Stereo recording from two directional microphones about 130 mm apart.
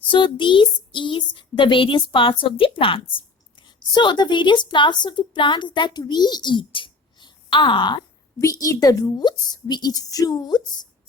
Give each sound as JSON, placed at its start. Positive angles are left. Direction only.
{"t": 0.0, "sound": "a woman's voice", "side_deg": 40}
{"t": 8.4, "sound": "a woman's voice", "side_deg": 25}